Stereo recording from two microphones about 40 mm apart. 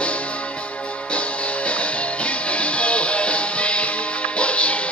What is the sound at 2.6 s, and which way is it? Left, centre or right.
Music, left.